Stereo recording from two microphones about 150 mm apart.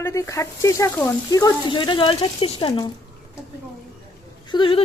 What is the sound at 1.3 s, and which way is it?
Speech, 25° left (ahead or behind).